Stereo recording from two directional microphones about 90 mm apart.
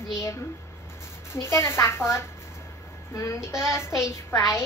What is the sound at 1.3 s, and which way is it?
A woman's voice, 30° left (ahead or behind).